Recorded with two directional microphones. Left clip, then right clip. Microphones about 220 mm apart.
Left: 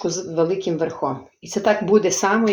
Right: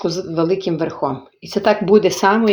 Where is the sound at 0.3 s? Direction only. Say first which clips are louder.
Right 1 dB; 30° right (ahead or behind).